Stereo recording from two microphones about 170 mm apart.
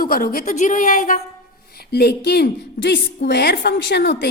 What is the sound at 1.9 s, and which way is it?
Speech, 70° left (ahead or behind).